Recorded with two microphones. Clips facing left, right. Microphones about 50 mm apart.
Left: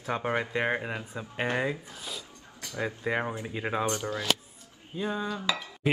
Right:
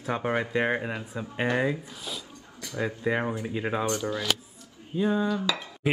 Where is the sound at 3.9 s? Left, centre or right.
Left.